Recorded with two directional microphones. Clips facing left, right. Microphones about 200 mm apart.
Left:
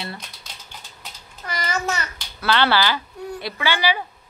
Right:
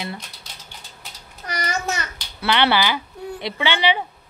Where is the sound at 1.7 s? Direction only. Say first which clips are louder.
Left 2 dB; 20° right (ahead or behind).